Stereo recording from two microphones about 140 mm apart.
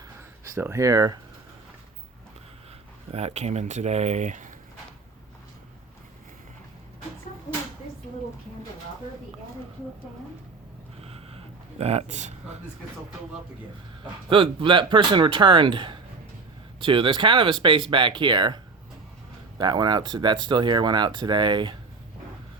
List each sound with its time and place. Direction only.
0.4 s speech: 20° right (ahead or behind)
3.1 s speech: 50° right (ahead or behind)
11.0 s a sound: 45° right (ahead or behind)
14.0 s speech: 40° right (ahead or behind)